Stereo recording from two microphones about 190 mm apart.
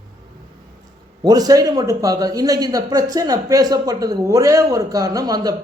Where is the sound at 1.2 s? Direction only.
20° right (ahead or behind).